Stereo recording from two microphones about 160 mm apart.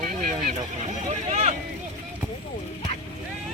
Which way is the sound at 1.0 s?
45° right (ahead or behind).